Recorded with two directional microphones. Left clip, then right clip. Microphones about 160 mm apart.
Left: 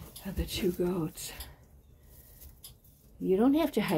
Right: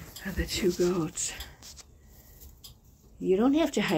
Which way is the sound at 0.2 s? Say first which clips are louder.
Right 4 dB; 15° left (ahead or behind).